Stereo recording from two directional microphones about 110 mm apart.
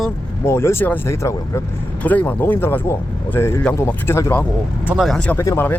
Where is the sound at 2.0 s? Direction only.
15° left (ahead or behind).